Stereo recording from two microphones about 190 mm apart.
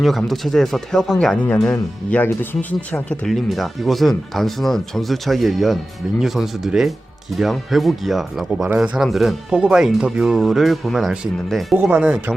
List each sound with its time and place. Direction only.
0.0 s speech: centre (ahead or behind)